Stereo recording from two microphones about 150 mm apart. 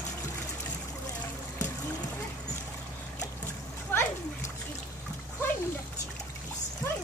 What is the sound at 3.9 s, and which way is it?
Splash, 15° left (ahead or behind).